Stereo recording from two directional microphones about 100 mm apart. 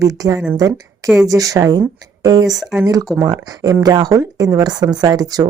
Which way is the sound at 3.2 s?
40° right (ahead or behind).